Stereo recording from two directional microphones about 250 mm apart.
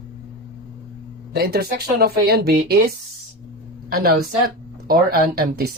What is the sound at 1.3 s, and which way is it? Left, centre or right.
Speech, right.